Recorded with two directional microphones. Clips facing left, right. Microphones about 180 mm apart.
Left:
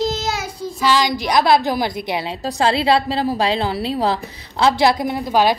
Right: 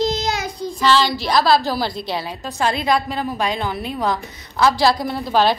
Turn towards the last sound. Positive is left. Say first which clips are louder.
# left 1 dB
turn(degrees=10)  # may be behind; listen again after turning